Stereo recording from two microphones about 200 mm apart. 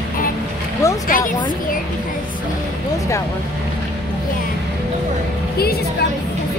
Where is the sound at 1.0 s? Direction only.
45° left (ahead or behind).